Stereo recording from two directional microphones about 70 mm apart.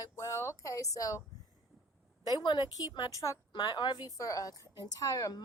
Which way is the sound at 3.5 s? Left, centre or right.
Left.